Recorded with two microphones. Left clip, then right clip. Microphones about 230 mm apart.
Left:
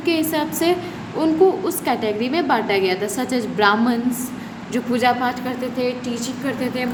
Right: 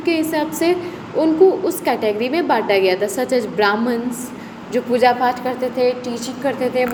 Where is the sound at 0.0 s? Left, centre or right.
Centre.